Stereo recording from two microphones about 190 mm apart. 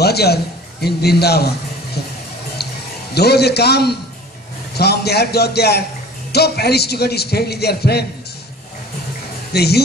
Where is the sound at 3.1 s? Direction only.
60° left (ahead or behind).